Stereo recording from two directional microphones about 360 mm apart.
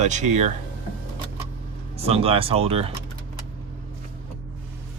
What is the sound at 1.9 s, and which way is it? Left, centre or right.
Speech, centre.